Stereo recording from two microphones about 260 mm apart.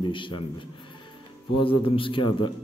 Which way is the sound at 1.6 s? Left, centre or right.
Centre.